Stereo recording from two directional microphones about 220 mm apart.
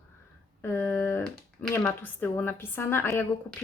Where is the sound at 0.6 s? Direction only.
10° left (ahead or behind).